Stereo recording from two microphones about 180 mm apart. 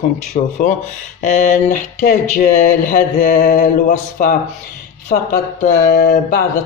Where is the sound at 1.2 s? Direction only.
40° left (ahead or behind).